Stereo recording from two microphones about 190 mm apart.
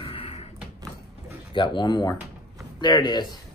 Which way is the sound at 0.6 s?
10° right (ahead or behind).